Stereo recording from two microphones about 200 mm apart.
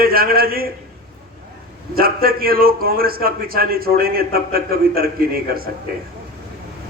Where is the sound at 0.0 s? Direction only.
50° right (ahead or behind).